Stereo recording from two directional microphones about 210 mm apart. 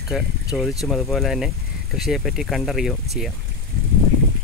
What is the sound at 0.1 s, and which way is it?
Speech, centre (ahead or behind).